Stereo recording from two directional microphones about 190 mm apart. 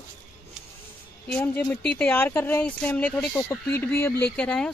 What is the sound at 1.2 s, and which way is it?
Speech, 10° left (ahead or behind).